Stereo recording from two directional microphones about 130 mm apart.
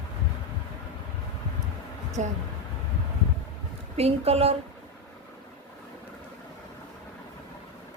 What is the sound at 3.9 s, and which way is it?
Speech, 50° right (ahead or behind).